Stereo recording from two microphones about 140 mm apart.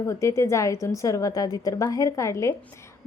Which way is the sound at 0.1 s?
20° left (ahead or behind).